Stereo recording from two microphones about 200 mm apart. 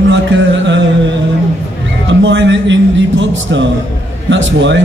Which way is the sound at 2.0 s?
65° right (ahead or behind).